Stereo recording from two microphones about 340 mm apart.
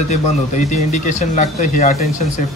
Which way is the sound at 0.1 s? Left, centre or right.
Centre.